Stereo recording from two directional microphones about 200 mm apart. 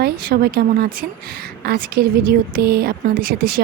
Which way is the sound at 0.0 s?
50° right (ahead or behind).